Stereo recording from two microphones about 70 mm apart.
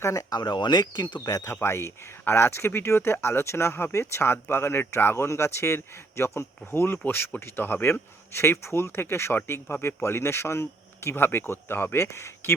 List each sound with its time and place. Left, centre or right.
0.0 s speech: left
0.3 s speech: left
1.3 s speech: left
1.5 s speech: left